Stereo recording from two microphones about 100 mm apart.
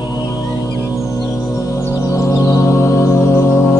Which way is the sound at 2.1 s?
30° left (ahead or behind).